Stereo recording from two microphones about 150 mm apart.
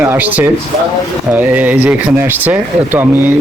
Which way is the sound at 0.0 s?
10° right (ahead or behind).